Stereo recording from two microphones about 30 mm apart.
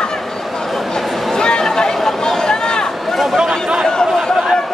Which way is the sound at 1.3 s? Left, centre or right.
Left.